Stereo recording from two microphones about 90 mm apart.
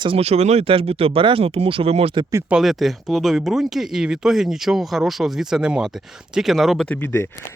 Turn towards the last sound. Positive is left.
turn(degrees=25)  # may be behind; listen again after turning